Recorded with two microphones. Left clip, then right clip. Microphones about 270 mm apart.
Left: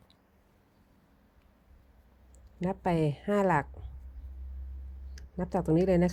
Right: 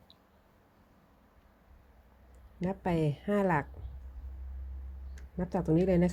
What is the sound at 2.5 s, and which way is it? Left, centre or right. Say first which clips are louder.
Speech: left 3 dB; centre.